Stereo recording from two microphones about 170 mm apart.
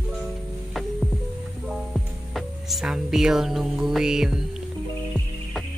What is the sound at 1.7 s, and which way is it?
Music, centre (ahead or behind).